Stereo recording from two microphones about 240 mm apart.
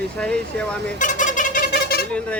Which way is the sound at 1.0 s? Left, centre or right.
Left.